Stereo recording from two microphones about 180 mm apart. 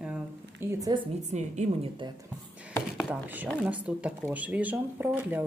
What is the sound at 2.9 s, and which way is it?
Speech, 10° right (ahead or behind).